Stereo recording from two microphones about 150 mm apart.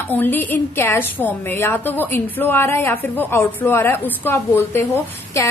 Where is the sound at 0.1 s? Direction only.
15° left (ahead or behind).